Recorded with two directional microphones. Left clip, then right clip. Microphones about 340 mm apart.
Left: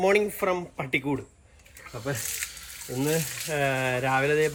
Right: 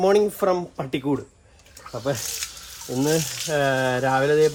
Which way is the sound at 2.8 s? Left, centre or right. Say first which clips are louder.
Right 5 dB; centre.